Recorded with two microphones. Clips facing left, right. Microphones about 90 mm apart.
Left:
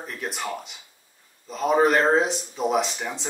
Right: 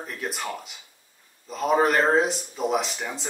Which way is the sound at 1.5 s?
Centre (ahead or behind).